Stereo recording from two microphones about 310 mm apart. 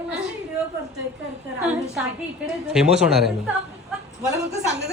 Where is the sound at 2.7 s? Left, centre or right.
Centre.